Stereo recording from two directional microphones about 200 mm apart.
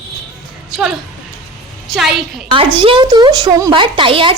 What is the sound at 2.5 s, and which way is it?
A woman's voice, 25° right (ahead or behind).